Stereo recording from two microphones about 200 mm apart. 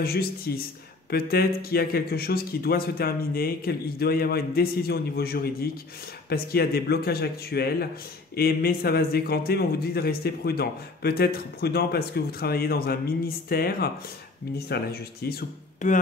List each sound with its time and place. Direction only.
0.0 s a man's voice: 50° left (ahead or behind)